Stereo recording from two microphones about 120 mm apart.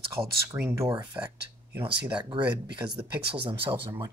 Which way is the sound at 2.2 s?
40° right (ahead or behind).